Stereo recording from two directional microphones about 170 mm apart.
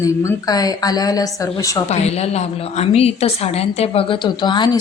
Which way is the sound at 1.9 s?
40° left (ahead or behind).